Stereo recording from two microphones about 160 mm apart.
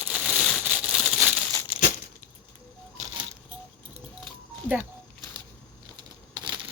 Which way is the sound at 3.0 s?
45° right (ahead or behind).